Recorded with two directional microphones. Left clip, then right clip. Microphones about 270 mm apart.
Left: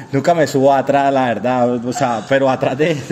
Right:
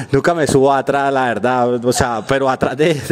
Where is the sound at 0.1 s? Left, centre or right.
Right.